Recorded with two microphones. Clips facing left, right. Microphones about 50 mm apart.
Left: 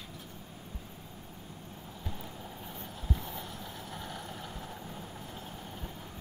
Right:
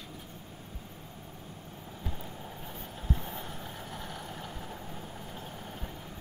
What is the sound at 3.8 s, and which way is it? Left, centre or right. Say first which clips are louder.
Vehicle: right 1 dB; centre.